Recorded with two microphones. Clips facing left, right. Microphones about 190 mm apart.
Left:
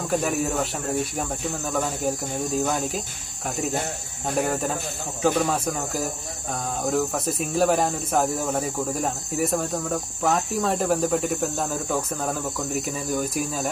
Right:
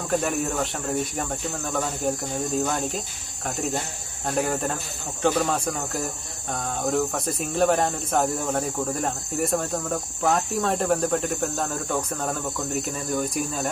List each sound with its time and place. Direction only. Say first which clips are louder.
0.1 s speech: even; 5° left (ahead or behind)